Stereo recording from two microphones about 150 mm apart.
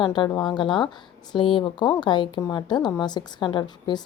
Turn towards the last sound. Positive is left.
turn(degrees=30)  # may be behind; listen again after turning